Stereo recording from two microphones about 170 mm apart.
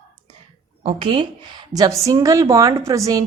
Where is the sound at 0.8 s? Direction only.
30° right (ahead or behind).